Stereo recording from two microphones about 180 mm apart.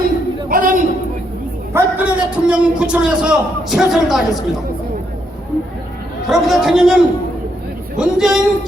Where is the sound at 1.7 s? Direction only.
5° right (ahead or behind).